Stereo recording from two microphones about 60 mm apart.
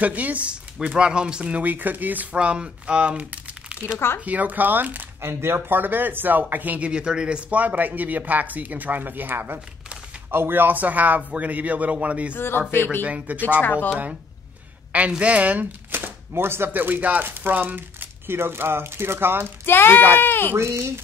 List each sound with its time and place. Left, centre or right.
0.0 s speech: right
5.2 s speech: right
6.9 s speech: centre
12.4 s speech: left
13.0 s speech: right
13.4 s speech: left
14.9 s speech: right
15.9 s speech: right
19.6 s speech: left
20.5 s a child's voice: right